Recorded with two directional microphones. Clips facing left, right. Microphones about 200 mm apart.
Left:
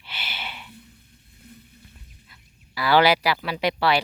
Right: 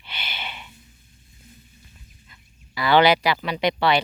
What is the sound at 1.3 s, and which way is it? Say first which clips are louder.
Boat: left 4 dB; 60° left (ahead or behind).